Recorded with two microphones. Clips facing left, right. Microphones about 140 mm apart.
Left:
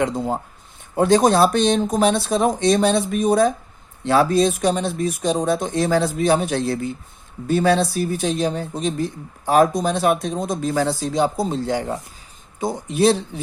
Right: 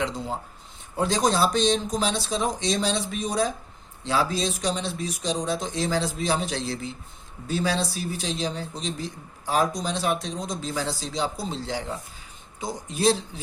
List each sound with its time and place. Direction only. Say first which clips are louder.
0.0 s speech: left 7 dB; 50° left (ahead or behind)